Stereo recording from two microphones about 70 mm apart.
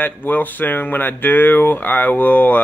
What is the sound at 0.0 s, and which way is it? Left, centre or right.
Speech, left.